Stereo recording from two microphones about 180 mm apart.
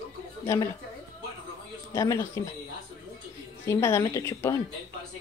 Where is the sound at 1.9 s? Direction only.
15° left (ahead or behind).